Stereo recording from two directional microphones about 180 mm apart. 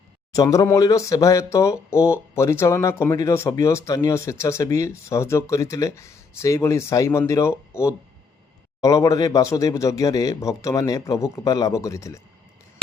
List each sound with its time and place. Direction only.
0.3 s speech: 15° left (ahead or behind)